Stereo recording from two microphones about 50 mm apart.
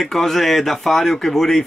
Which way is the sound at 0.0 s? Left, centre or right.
Centre.